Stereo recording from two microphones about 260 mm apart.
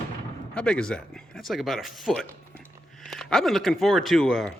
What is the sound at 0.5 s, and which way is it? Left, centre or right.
Speech, centre.